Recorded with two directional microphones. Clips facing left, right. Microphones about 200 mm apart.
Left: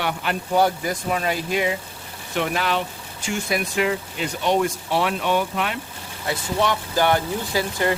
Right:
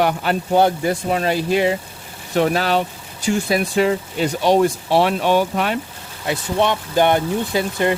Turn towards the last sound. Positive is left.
turn(degrees=-20)  # may be behind; listen again after turning